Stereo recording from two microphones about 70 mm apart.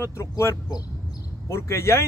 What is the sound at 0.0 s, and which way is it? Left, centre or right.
Speech, left.